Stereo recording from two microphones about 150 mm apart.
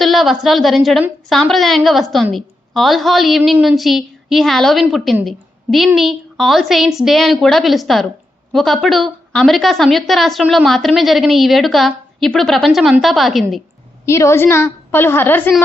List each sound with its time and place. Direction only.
0.0 s a woman's voice: centre (ahead or behind)
14.0 s a woman's voice: 20° left (ahead or behind)